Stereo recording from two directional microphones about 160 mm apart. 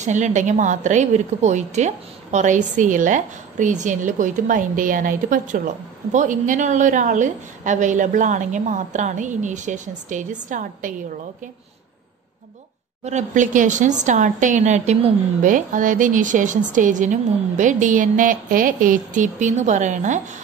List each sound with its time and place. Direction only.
0.0 s a woman's voice: 50° right (ahead or behind)
13.0 s a woman's voice: 50° right (ahead or behind)